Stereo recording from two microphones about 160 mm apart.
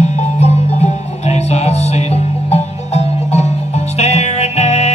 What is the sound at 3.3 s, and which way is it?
Music, 45° left (ahead or behind).